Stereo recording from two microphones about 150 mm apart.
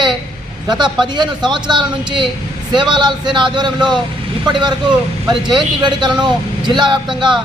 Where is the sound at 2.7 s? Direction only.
30° right (ahead or behind).